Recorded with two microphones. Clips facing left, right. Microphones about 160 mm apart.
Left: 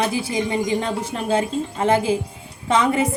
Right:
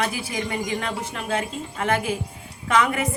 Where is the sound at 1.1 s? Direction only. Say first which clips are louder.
Left 7 dB; 30° left (ahead or behind).